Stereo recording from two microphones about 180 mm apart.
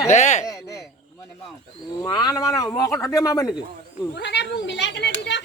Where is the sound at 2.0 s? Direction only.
20° left (ahead or behind).